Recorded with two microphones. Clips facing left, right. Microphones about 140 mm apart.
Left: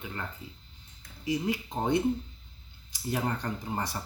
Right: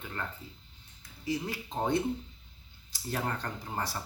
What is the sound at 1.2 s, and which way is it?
Speech, 15° left (ahead or behind).